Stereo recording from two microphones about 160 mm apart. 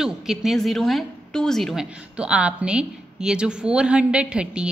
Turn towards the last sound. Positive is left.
turn(degrees=-5)  # may be behind; listen again after turning